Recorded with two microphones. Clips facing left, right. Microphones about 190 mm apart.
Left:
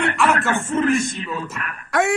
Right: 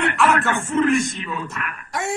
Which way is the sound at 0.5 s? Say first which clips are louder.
Even; 35° left (ahead or behind).